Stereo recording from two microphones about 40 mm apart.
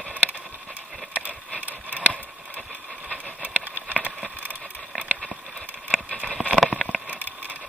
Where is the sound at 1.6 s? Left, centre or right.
Right.